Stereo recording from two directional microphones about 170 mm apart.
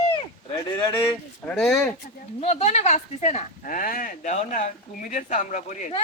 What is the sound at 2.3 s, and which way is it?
Speech, 40° left (ahead or behind).